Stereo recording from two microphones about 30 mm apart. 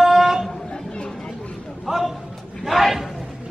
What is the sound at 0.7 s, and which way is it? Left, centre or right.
Chatter, left.